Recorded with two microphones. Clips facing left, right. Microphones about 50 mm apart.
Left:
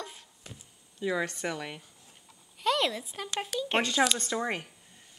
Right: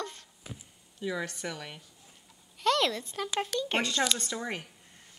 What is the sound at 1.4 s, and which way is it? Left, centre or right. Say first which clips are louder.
Speech: left 4 dB; centre.